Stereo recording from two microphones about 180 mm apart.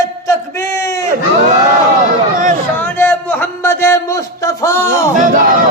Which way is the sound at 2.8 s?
10° left (ahead or behind).